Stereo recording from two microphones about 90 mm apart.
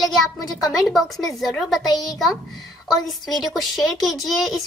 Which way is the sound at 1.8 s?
45° left (ahead or behind).